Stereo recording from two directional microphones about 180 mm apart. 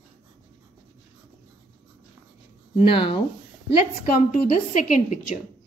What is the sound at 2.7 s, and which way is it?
Speech, 30° left (ahead or behind).